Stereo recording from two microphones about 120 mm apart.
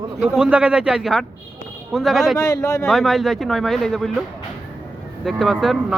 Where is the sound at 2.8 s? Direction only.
Centre (ahead or behind).